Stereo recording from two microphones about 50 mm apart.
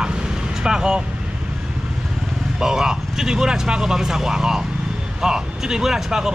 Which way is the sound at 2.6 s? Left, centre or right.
Centre.